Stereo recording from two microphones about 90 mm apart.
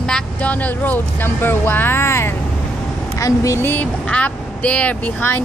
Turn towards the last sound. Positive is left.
turn(degrees=15)  # may be behind; listen again after turning